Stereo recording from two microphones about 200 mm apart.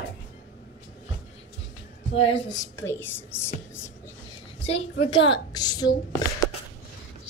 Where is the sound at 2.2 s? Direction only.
30° left (ahead or behind).